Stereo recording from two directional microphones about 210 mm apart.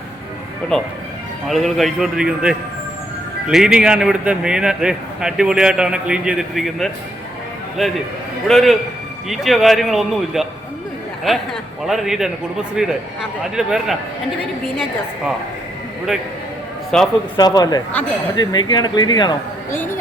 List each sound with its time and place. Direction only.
1.5 s a man's voice: centre (ahead or behind)
16.9 s a man's voice: 5° left (ahead or behind)
17.3 s speech: 20° left (ahead or behind)